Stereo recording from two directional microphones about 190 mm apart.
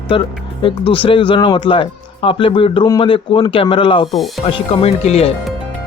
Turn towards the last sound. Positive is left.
turn(degrees=35)  # may be behind; listen again after turning